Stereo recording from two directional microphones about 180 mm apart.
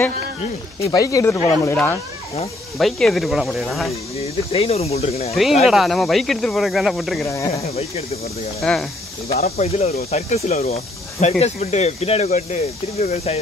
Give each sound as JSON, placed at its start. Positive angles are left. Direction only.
{"t": 0.7, "sound": "speech", "side_deg": 20}
{"t": 4.2, "sound": "speech", "side_deg": 35}
{"t": 5.3, "sound": "speech", "side_deg": 0}
{"t": 7.2, "sound": "speech", "side_deg": 15}
{"t": 7.5, "sound": "speech", "side_deg": 35}
{"t": 8.6, "sound": "speech", "side_deg": 5}
{"t": 9.6, "sound": "speech", "side_deg": 35}